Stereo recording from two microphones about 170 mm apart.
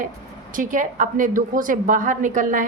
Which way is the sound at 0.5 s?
50° right (ahead or behind).